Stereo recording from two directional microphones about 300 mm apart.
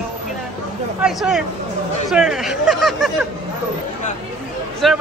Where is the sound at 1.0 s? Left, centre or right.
Centre.